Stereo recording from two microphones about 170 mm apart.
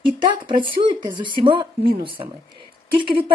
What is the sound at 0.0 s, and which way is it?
Speech, 30° right (ahead or behind).